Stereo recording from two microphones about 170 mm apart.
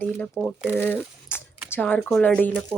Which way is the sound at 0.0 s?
10° left (ahead or behind).